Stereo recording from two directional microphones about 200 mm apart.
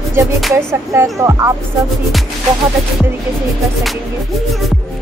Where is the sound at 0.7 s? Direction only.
15° right (ahead or behind).